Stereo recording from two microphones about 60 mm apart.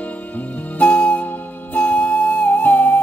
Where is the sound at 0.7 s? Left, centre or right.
Left.